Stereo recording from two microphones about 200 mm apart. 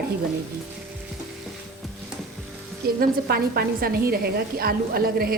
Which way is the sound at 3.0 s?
50° right (ahead or behind).